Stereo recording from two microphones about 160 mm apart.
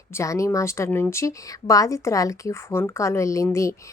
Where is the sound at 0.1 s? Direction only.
20° left (ahead or behind).